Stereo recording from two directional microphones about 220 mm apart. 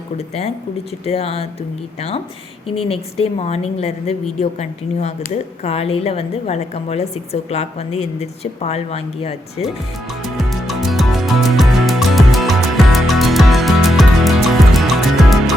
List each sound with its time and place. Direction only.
1.0 s a woman's voice: 25° left (ahead or behind)
10.2 s music: centre (ahead or behind)